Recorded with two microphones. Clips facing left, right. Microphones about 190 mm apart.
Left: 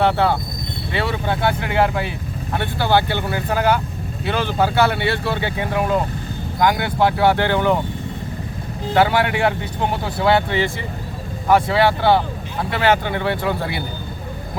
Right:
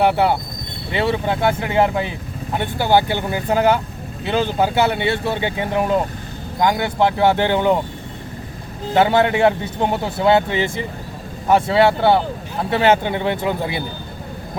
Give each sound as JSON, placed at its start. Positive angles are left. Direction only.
{"t": 0.0, "sound": "speech", "side_deg": -15}
{"t": 9.0, "sound": "speech", "side_deg": -25}